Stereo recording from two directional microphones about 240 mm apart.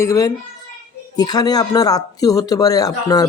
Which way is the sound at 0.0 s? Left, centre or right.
Centre.